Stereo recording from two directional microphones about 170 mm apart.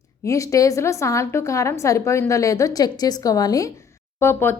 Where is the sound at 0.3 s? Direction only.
20° left (ahead or behind).